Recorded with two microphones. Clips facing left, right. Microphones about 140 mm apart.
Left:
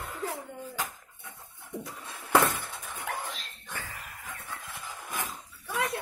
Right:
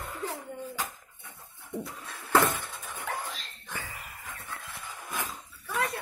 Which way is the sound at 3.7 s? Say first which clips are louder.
Right 1 dB; 10° right (ahead or behind).